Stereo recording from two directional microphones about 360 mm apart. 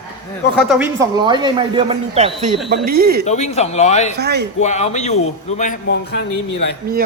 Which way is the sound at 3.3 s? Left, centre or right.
Centre.